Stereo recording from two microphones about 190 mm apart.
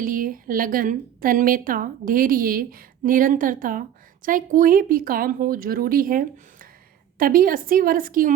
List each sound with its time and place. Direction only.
0.0 s a woman's voice: 45° right (ahead or behind)